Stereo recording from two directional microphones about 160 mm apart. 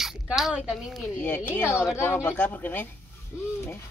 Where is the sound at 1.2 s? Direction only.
10° left (ahead or behind).